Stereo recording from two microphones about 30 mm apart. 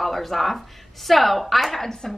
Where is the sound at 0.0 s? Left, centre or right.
Centre.